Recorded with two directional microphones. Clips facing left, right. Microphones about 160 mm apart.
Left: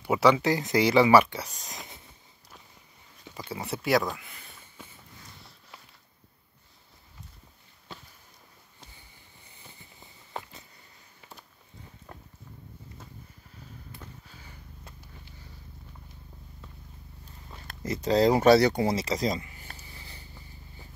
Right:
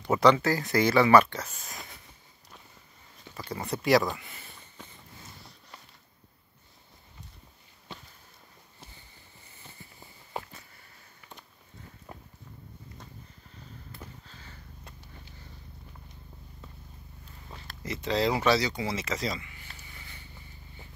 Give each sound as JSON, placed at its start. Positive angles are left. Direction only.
{"t": 0.0, "sound": "speech", "side_deg": 10}
{"t": 3.3, "sound": "speech", "side_deg": 10}
{"t": 12.1, "sound": "walk", "side_deg": -10}
{"t": 14.2, "sound": "a sound", "side_deg": 10}
{"t": 17.6, "sound": "speech", "side_deg": 40}